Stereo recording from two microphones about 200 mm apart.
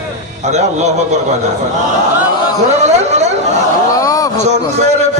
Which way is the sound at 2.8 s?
35° right (ahead or behind).